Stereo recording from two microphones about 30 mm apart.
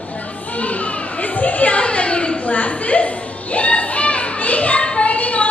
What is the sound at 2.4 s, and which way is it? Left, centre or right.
Children playing, left.